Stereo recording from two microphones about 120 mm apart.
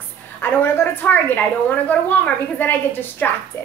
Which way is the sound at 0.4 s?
20° left (ahead or behind).